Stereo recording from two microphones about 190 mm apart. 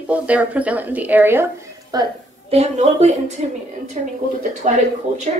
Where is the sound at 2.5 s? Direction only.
35° right (ahead or behind).